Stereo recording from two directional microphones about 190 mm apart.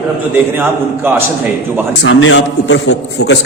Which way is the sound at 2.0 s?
80° left.